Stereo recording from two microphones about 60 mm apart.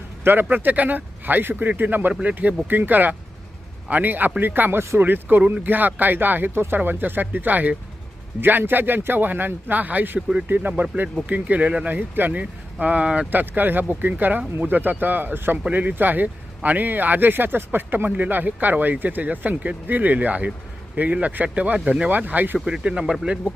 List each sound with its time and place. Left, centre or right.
0.4 s speech: right
6.5 s speech: right
6.7 s speech: right
11.9 s speech: right
13.3 s speech: right
22.6 s speech: centre